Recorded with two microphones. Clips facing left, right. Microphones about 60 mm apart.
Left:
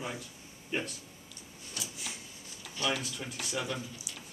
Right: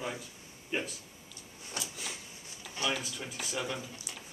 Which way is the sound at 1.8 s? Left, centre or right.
Right.